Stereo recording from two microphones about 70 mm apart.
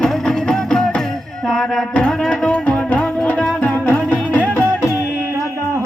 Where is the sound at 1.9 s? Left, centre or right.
Centre.